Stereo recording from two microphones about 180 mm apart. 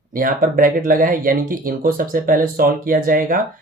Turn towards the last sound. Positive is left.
turn(degrees=-50)  # may be behind; listen again after turning